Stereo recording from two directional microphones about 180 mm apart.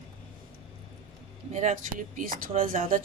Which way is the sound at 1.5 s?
45° right (ahead or behind).